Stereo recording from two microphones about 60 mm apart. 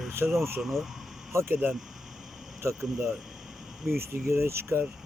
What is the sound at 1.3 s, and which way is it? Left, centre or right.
Speech, right.